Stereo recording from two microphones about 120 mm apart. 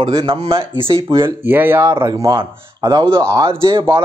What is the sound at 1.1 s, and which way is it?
Speech, 20° right (ahead or behind).